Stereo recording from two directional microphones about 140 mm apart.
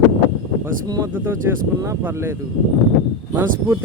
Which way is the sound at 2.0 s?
15° right (ahead or behind).